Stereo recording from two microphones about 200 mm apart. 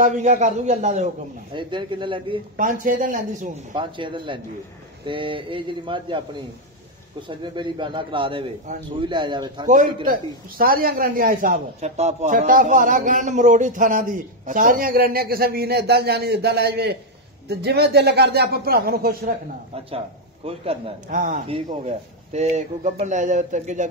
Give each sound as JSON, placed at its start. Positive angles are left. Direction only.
{"t": 0.0, "sound": "speech", "side_deg": -35}
{"t": 1.5, "sound": "a man's voice", "side_deg": -25}
{"t": 2.5, "sound": "speech", "side_deg": -45}
{"t": 3.7, "sound": "a man's voice", "side_deg": -25}
{"t": 10.6, "sound": "speech", "side_deg": -45}
{"t": 20.4, "sound": "a man's voice", "side_deg": -30}
{"t": 21.1, "sound": "speech", "side_deg": -40}
{"t": 21.5, "sound": "speech", "side_deg": -30}